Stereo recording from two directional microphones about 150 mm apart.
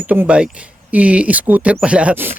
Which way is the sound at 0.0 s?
10° right (ahead or behind).